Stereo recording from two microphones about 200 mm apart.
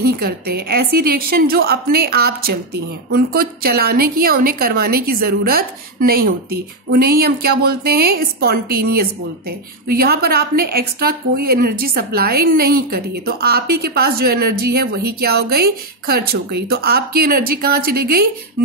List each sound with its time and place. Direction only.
0.0 s a woman's voice: 50° right (ahead or behind)